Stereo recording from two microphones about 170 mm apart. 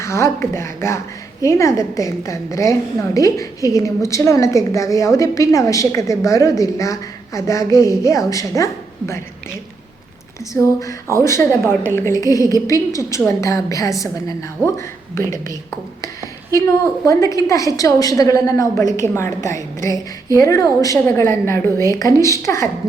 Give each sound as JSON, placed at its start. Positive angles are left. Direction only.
{"t": 0.0, "sound": "a woman's voice", "side_deg": 15}
{"t": 10.5, "sound": "a woman's voice", "side_deg": 20}
{"t": 16.5, "sound": "a woman's voice", "side_deg": 20}